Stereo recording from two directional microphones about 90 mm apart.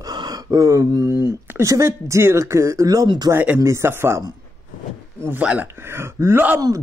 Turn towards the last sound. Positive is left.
turn(degrees=-45)  # may be behind; listen again after turning